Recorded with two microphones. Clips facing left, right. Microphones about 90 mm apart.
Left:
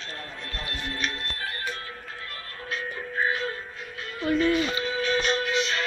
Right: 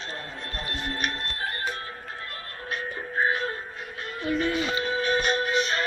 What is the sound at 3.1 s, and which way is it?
Music, 35° right (ahead or behind).